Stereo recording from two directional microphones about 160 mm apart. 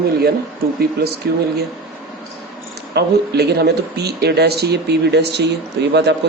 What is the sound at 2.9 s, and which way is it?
Speech, 90° right.